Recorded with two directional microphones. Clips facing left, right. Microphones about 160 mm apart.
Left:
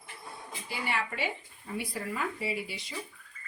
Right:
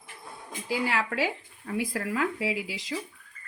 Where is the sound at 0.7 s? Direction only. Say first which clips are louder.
Right 6 dB; 90° right.